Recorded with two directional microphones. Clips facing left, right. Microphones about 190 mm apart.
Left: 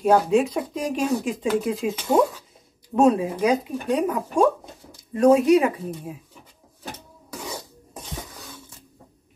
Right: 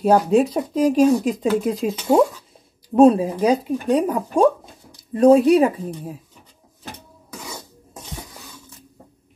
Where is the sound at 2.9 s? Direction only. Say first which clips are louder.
Right 5 dB; 35° right (ahead or behind).